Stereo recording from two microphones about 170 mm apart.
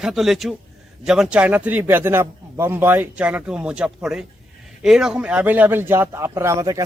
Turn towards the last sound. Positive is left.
turn(degrees=-20)  # may be behind; listen again after turning